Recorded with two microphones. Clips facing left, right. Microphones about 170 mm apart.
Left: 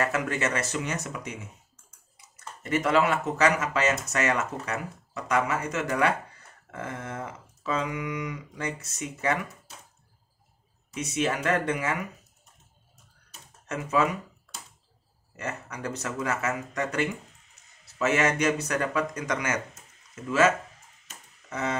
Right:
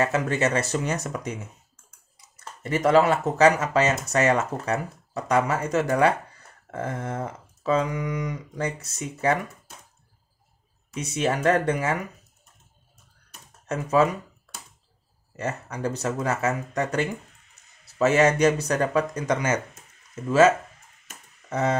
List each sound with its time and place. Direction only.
0.0 s speech: 30° right (ahead or behind)
2.3 s speech: 35° right (ahead or behind)
11.0 s speech: 35° right (ahead or behind)
13.7 s speech: 35° right (ahead or behind)
15.3 s speech: 30° right (ahead or behind)